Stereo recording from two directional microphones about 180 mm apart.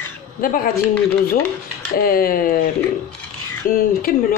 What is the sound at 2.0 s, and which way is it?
Speech, 55° left (ahead or behind).